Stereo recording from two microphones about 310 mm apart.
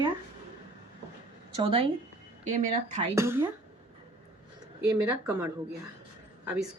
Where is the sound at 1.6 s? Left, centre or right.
Centre.